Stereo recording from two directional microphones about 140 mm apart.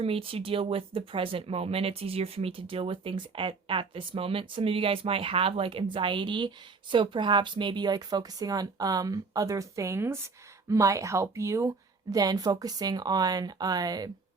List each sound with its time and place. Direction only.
0.0 s speech: 40° right (ahead or behind)